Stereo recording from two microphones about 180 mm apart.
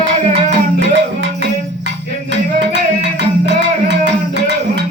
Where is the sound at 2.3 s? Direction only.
75° right (ahead or behind).